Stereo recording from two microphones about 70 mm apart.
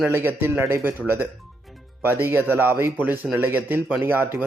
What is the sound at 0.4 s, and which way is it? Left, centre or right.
A man's voice, right.